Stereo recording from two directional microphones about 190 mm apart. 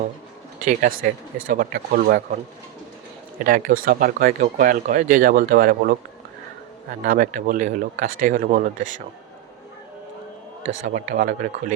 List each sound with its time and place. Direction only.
0.6 s speech: 45° right (ahead or behind)
3.4 s speech: 50° right (ahead or behind)
7.0 s speech: 45° right (ahead or behind)
10.8 s speech: 45° right (ahead or behind)